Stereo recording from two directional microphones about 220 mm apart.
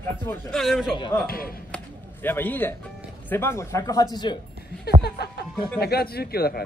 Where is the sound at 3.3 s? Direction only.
10° left (ahead or behind).